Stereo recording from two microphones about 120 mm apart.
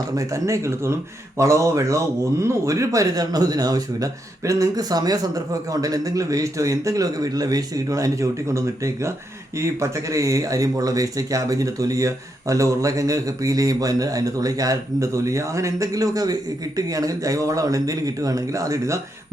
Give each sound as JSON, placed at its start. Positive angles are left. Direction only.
{"t": 0.2, "sound": "speech", "side_deg": -25}